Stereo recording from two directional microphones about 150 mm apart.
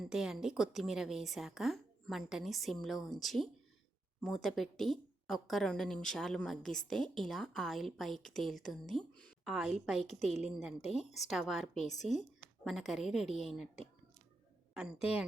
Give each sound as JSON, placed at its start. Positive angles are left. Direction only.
{"t": 0.0, "sound": "a woman's voice", "side_deg": -5}